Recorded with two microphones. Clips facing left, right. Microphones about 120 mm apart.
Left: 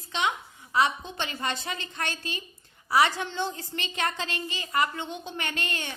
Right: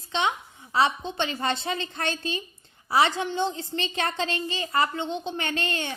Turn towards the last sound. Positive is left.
turn(degrees=-30)  # may be behind; listen again after turning